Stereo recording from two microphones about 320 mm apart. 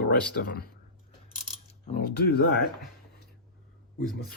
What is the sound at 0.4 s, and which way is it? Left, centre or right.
Speech, left.